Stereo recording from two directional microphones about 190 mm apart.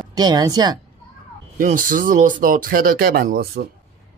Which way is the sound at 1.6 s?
45° right (ahead or behind).